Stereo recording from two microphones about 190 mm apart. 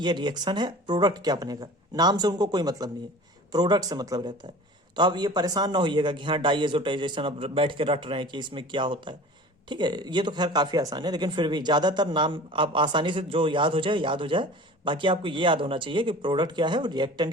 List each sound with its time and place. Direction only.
0.0 s speech: 25° right (ahead or behind)